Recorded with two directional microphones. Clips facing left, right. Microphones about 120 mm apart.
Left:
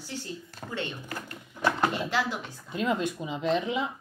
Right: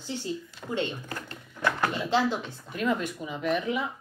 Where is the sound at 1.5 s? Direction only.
20° left (ahead or behind).